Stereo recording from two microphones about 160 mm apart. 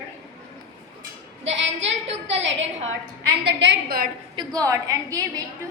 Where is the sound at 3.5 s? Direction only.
80° right.